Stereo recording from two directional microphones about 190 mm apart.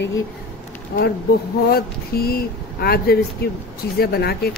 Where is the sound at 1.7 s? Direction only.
55° left (ahead or behind).